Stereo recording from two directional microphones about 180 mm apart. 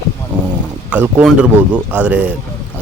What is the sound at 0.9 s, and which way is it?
Speech, 10° right (ahead or behind).